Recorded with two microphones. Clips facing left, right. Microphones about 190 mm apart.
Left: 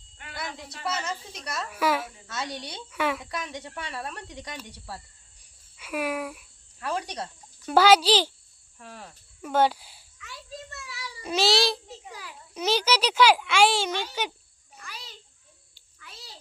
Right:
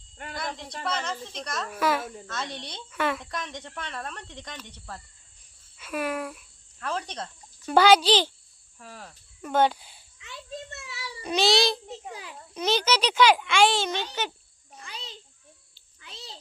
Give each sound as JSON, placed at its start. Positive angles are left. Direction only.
{"t": 0.3, "sound": "speech", "side_deg": 5}
{"t": 10.2, "sound": "children playing", "side_deg": -20}
{"t": 11.2, "sound": "child singing", "side_deg": 5}
{"t": 12.5, "sound": "speech", "side_deg": 10}
{"t": 14.8, "sound": "a sound", "side_deg": -20}